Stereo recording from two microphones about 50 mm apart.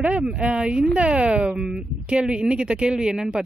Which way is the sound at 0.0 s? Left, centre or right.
Right.